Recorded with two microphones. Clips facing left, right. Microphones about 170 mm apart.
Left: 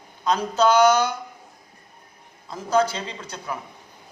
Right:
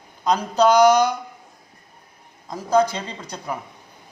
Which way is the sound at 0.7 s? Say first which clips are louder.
Right 3 dB; 15° right (ahead or behind).